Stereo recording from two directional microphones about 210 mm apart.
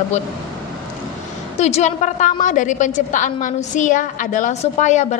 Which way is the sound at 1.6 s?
30° left (ahead or behind).